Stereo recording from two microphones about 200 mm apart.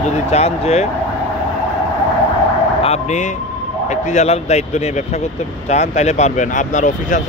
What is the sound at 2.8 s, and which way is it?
Speech, 35° left (ahead or behind).